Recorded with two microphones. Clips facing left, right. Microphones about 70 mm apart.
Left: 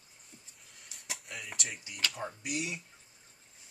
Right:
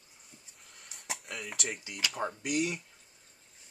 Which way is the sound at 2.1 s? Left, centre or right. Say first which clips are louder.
Right 5 dB; right.